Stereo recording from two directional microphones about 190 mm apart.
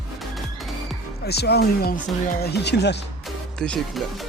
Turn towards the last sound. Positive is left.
turn(degrees=5)  # may be behind; listen again after turning